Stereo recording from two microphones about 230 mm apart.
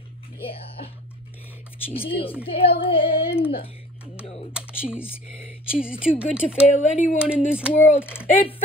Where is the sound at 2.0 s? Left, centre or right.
Left.